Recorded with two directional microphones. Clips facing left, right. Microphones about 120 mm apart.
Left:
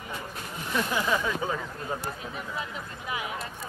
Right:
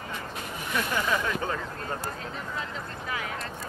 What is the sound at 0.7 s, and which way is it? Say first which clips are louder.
Speech: left 1 dB; 10° left (ahead or behind).